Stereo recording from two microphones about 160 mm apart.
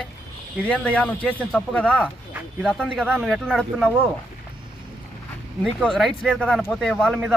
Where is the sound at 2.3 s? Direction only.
10° right (ahead or behind).